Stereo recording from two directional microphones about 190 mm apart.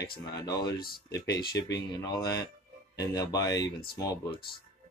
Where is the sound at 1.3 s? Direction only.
60° left (ahead or behind).